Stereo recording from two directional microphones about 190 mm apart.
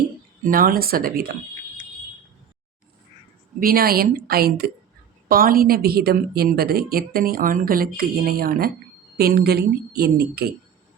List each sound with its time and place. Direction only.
0.4 s a woman's voice: 50° right (ahead or behind)
3.6 s a woman's voice: 50° right (ahead or behind)